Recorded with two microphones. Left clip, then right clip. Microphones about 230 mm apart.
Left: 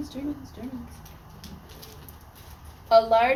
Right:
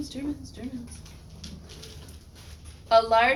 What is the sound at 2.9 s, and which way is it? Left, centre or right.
Speech, centre.